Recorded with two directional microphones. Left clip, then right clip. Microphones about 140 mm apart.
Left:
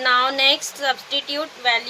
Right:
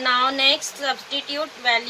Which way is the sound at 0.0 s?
90° left.